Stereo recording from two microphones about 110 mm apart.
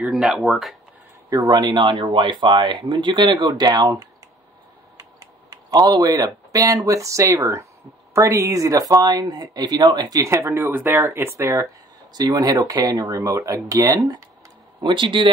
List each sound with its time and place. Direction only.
0.0 s speech: 5° right (ahead or behind)
1.3 s speech: 35° right (ahead or behind)
12.1 s speech: 35° right (ahead or behind)
14.8 s speech: 45° right (ahead or behind)